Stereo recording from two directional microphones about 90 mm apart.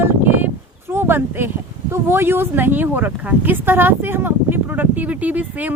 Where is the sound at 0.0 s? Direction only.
20° right (ahead or behind).